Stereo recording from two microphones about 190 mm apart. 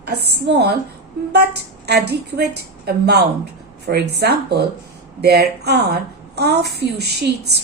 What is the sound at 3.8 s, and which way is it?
A woman's voice, 60° right (ahead or behind).